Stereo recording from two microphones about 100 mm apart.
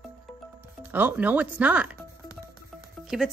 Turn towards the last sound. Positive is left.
turn(degrees=-5)  # may be behind; listen again after turning